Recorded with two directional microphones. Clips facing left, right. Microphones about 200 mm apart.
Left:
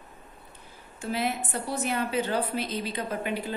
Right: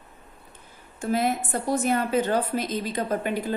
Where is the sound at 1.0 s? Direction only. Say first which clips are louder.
Right 5 dB; 45° right (ahead or behind).